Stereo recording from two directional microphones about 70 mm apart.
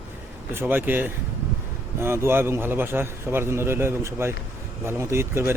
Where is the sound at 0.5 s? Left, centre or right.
Right.